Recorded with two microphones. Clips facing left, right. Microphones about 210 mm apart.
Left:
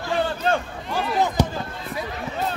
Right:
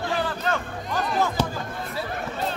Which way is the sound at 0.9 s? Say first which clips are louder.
Left 2 dB; 15° left (ahead or behind).